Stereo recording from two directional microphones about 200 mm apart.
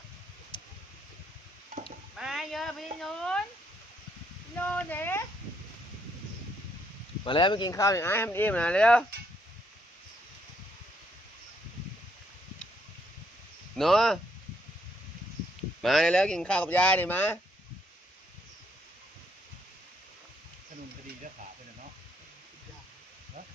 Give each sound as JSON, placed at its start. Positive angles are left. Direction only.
{"t": 0.5, "sound": "a sound", "side_deg": 25}
{"t": 2.1, "sound": "a sound", "side_deg": 0}
{"t": 4.6, "sound": "speech", "side_deg": 10}
{"t": 7.3, "sound": "speech", "side_deg": 25}
{"t": 13.7, "sound": "speech", "side_deg": 0}
{"t": 15.8, "sound": "speech", "side_deg": 0}